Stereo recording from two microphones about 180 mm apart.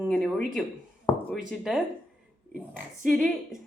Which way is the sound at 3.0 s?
Centre (ahead or behind).